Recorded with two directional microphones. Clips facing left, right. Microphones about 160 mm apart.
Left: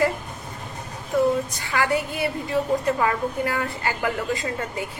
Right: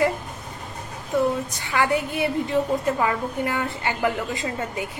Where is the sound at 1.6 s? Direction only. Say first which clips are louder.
Right 1 dB; 20° right (ahead or behind).